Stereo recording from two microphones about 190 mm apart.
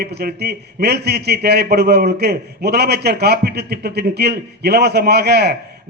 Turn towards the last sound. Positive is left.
turn(degrees=-60)  # may be behind; listen again after turning